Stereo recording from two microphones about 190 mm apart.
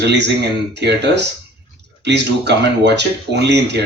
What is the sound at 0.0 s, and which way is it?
Speech, 65° right (ahead or behind).